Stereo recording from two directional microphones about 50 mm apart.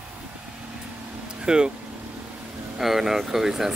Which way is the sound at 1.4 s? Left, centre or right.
Centre.